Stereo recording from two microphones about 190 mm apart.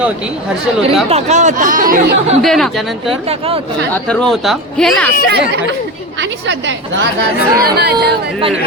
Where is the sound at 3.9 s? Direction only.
5° left (ahead or behind).